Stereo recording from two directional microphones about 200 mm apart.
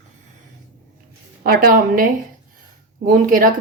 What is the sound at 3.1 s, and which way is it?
Speech, 45° right (ahead or behind).